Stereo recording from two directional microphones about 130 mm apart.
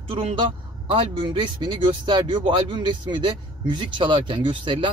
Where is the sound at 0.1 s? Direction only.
45° right (ahead or behind).